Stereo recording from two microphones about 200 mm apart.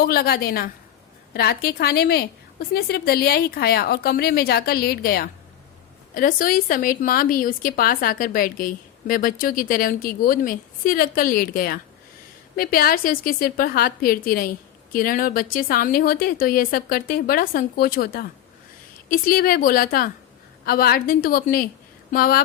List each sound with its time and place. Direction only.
0.0 s a woman's voice: 50° left (ahead or behind)